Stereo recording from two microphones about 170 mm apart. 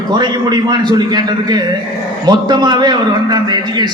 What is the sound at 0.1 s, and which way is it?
A man's voice, 25° right (ahead or behind).